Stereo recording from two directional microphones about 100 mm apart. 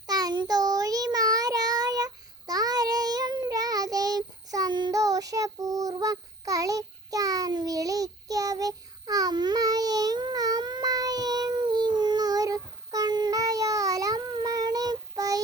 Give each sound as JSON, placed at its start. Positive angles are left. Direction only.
{"t": 0.1, "sound": "child singing", "side_deg": -40}